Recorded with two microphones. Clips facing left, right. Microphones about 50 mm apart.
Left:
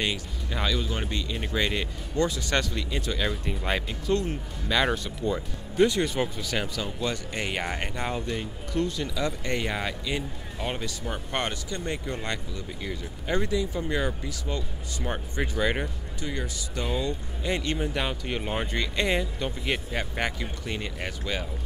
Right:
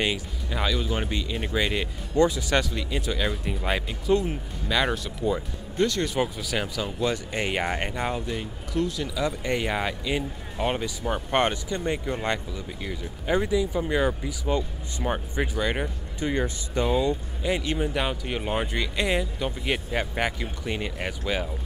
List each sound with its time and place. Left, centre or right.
0.0 s speech: centre
5.8 s speech: centre
6.0 s speech: centre
12.8 s speech: centre
16.2 s speech: right
16.8 s speech: centre